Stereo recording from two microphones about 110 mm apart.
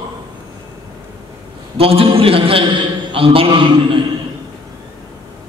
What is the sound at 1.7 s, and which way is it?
A man's voice, 60° right (ahead or behind).